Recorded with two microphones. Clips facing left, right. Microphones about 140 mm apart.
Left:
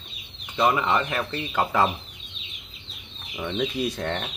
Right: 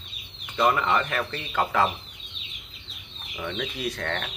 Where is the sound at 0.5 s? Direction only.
15° left (ahead or behind).